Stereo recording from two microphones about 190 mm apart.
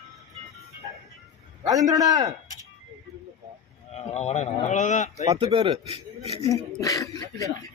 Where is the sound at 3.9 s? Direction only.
35° left (ahead or behind).